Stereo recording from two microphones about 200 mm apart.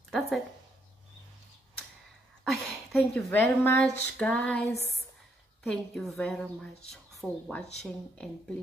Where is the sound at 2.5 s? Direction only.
5° left (ahead or behind).